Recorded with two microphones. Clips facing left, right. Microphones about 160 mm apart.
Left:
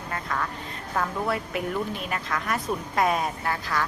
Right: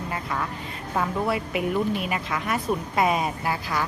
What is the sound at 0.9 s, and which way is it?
A woman's voice, 5° right (ahead or behind).